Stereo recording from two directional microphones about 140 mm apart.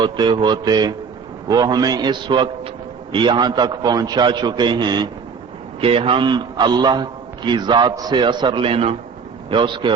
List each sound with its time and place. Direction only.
0.0 s a man's voice: 35° right (ahead or behind)